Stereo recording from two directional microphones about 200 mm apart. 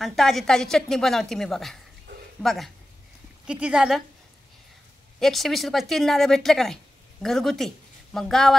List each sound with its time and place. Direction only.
0.0 s a woman's voice: centre (ahead or behind)
2.1 s a sound: 55° right (ahead or behind)
2.4 s a woman's voice: centre (ahead or behind)
5.2 s speech: centre (ahead or behind)